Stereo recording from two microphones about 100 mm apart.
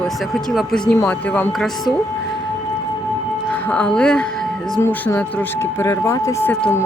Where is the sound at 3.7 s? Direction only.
10° left (ahead or behind).